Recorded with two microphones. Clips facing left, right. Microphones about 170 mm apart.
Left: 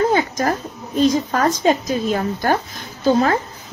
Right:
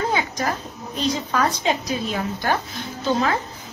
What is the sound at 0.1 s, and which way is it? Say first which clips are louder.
A woman's voice: left 5 dB; 45° left (ahead or behind).